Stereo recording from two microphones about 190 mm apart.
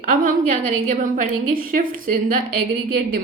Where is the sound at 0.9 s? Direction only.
45° right (ahead or behind).